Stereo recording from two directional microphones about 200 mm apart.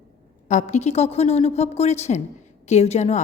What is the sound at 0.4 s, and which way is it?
A woman's voice, 35° left (ahead or behind).